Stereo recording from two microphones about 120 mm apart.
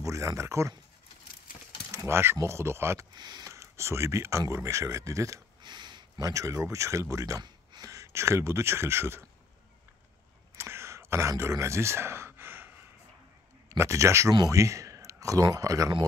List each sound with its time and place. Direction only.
0.0 s speech: 25° right (ahead or behind)
2.0 s speech: 20° right (ahead or behind)
3.2 s speech: 35° right (ahead or behind)
5.6 s speech: 40° right (ahead or behind); by 9.2 s 20° right (ahead or behind)
10.6 s sigh: 20° right (ahead or behind)
13.7 s speech: 25° right (ahead or behind)